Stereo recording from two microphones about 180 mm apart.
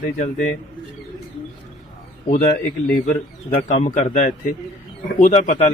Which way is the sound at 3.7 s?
45° left (ahead or behind).